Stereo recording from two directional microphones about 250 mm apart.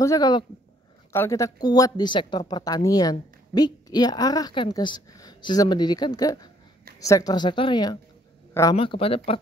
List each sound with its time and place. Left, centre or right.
0.0 s a woman's voice: centre